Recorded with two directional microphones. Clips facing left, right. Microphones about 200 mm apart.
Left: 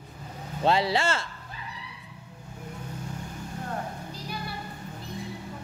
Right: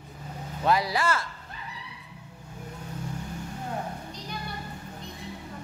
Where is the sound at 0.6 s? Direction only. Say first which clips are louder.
Left 1 dB; 25° left (ahead or behind).